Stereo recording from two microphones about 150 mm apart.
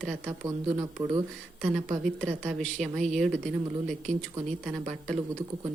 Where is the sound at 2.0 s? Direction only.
5° left (ahead or behind).